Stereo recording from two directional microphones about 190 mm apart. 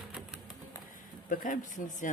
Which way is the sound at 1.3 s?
45° left (ahead or behind).